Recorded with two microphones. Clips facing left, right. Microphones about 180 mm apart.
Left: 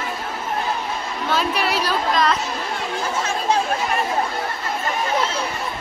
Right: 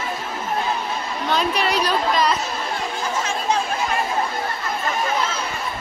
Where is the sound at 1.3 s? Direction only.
5° left (ahead or behind).